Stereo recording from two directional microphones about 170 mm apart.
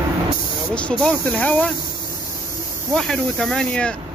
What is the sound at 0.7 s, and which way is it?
Speech, 5° left (ahead or behind).